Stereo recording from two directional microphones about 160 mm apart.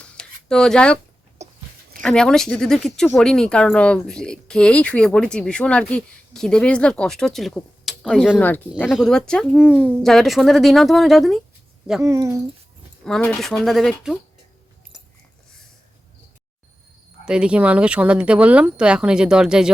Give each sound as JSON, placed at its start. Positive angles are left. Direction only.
{"t": 0.0, "sound": "a sound", "side_deg": 5}
{"t": 1.4, "sound": "a sound", "side_deg": -45}
{"t": 2.0, "sound": "speech", "side_deg": 5}
{"t": 12.0, "sound": "speech", "side_deg": -20}
{"t": 13.1, "sound": "speech", "side_deg": 5}
{"t": 17.2, "sound": "speech", "side_deg": -5}